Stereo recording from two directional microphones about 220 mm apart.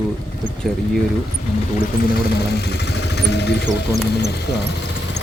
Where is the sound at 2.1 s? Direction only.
45° left (ahead or behind).